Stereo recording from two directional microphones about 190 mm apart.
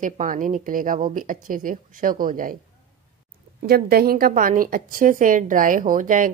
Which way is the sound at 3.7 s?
55° right (ahead or behind).